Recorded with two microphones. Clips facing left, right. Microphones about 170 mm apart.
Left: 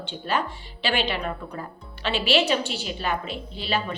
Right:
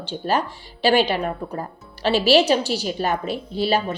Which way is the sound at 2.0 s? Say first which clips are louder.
Right 6 dB; 40° right (ahead or behind).